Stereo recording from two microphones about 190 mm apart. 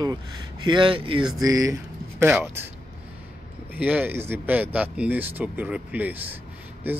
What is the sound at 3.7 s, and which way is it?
Speech, 10° right (ahead or behind).